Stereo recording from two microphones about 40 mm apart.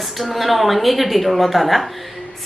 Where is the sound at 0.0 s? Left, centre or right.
Centre.